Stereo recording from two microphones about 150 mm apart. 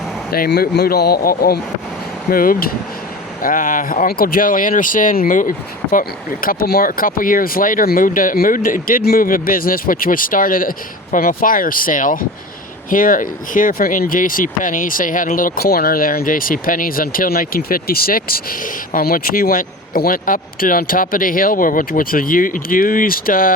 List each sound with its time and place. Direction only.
0.3 s speech: 90° left
2.3 s speech: 70° left (ahead or behind)